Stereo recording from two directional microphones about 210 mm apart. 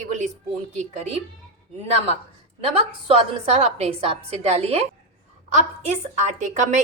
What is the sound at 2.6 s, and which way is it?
A woman's voice, 30° right (ahead or behind).